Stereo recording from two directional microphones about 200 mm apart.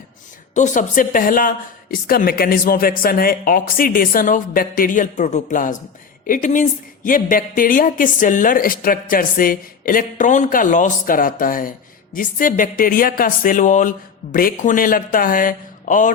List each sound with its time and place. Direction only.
0.5 s a woman's voice: 40° left (ahead or behind)